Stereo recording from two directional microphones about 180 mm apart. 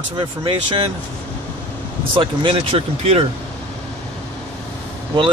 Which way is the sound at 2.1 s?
30° right (ahead or behind).